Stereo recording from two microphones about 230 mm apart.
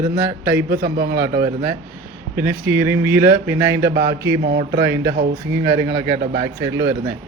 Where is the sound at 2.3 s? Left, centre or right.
Centre.